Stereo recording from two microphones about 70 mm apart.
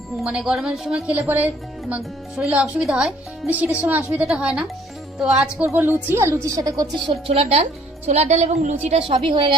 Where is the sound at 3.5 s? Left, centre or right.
Right.